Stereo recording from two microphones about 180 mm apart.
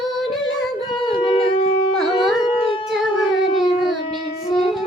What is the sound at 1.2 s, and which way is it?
Shofar, 30° left (ahead or behind).